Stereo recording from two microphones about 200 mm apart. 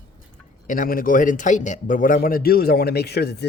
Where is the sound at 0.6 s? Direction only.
40° left (ahead or behind).